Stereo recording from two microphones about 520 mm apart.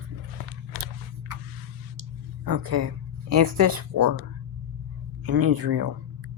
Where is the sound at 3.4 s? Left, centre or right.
Right.